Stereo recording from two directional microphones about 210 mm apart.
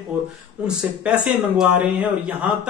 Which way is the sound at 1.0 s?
5° right (ahead or behind).